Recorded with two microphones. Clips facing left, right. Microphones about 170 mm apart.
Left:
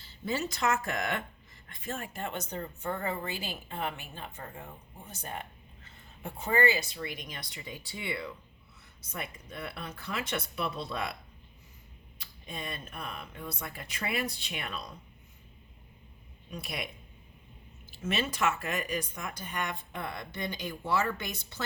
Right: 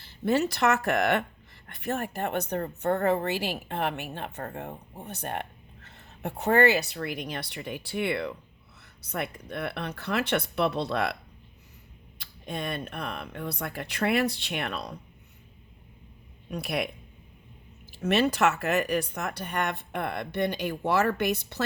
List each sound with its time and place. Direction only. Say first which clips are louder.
0.0 s speech: right 8 dB; 65° right (ahead or behind)
12.2 s speech: right 7 dB; 70° right (ahead or behind)
16.5 s speech: right 9 dB; 65° right (ahead or behind)
18.0 s speech: right 7 dB; 70° right (ahead or behind)